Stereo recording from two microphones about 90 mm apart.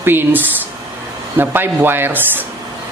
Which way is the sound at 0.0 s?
25° right (ahead or behind).